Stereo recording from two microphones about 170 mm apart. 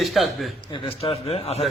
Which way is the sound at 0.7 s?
35° left (ahead or behind).